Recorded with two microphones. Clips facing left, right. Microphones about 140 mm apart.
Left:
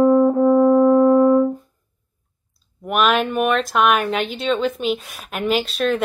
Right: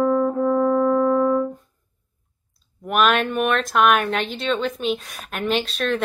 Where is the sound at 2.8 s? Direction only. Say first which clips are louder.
Left 1 dB; centre (ahead or behind).